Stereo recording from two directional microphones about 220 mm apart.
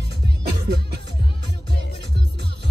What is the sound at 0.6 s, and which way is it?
Music, 50° right (ahead or behind).